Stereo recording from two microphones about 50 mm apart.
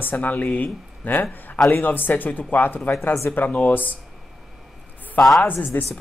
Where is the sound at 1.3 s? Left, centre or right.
Left.